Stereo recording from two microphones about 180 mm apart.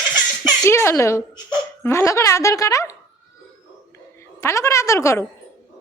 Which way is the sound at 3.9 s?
15° left (ahead or behind).